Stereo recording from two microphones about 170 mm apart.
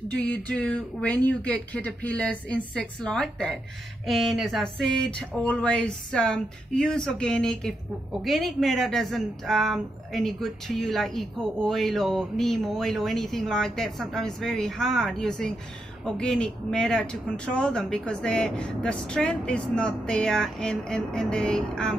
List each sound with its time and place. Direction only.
0.1 s speech: 5° left (ahead or behind)